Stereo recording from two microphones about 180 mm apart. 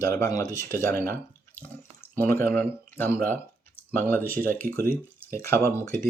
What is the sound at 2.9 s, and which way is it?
Speech, 10° left (ahead or behind).